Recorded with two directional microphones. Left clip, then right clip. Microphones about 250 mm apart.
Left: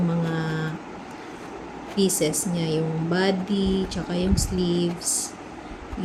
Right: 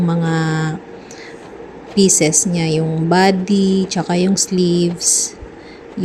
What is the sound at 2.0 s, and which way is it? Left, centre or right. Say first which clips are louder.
A woman's voice: right 10 dB; right.